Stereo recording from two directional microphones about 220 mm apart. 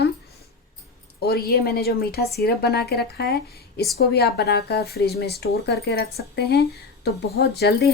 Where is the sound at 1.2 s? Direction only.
45° left (ahead or behind).